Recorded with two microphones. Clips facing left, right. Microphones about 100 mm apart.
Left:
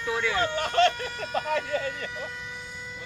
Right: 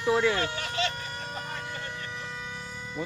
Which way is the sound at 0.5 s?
50° left (ahead or behind).